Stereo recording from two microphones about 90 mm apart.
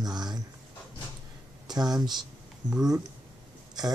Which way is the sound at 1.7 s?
50° right (ahead or behind).